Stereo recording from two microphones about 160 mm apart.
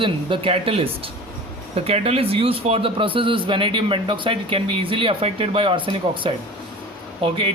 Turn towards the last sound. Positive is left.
turn(degrees=-35)  # may be behind; listen again after turning